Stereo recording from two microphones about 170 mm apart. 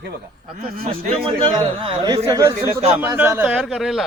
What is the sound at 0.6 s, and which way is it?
Speech, 55° right (ahead or behind).